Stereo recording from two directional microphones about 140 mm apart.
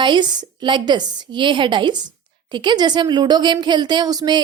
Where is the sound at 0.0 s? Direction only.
35° right (ahead or behind).